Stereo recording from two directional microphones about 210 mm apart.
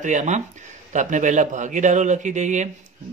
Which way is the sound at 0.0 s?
35° right (ahead or behind).